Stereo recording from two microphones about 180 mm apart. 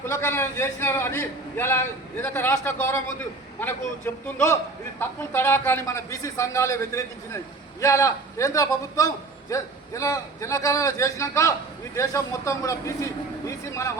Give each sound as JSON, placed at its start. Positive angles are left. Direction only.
{"t": 0.0, "sound": "a man's voice", "side_deg": 15}